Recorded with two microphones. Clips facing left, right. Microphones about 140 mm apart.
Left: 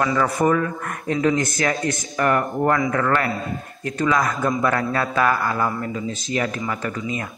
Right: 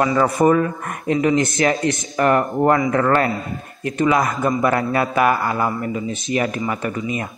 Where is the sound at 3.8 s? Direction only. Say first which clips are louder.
Right 3 dB; 20° right (ahead or behind).